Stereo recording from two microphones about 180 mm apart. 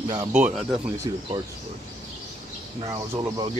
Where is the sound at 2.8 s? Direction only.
20° right (ahead or behind).